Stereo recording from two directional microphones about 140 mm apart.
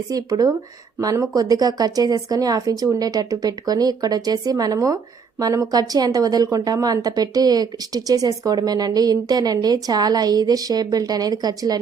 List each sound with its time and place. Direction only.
0.1 s a woman's voice: 25° right (ahead or behind)